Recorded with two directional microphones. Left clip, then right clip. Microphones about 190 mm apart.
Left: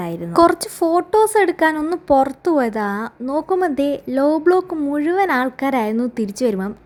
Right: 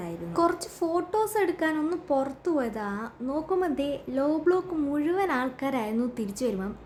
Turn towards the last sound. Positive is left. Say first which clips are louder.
# left 10 dB
turn(degrees=40)  # may be behind; listen again after turning